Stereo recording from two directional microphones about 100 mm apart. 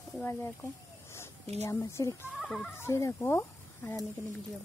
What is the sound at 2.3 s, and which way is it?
Goat, 5° left (ahead or behind).